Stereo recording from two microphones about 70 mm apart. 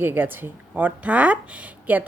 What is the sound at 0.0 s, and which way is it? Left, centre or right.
A woman's voice, right.